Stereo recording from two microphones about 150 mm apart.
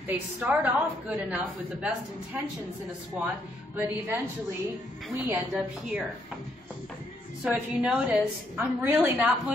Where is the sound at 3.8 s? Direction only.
15° right (ahead or behind).